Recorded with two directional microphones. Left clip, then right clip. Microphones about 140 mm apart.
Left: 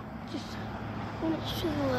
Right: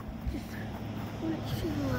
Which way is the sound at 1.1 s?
25° right (ahead or behind).